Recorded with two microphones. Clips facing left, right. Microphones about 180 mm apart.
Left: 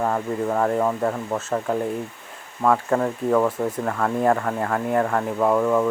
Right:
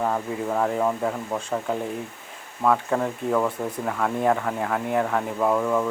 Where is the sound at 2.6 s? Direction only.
Centre (ahead or behind).